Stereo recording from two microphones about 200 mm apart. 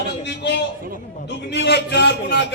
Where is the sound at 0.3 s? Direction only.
60° left (ahead or behind).